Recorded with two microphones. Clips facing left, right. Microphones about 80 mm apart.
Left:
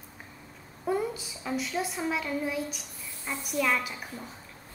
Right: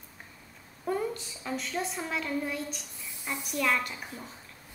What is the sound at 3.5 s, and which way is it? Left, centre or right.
Speech, centre.